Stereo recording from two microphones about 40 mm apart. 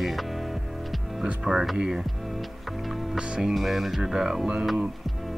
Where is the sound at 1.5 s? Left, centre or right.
Centre.